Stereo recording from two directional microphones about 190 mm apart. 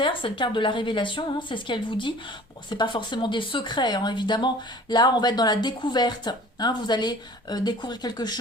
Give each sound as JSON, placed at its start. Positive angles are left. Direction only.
{"t": 0.0, "sound": "speech", "side_deg": 25}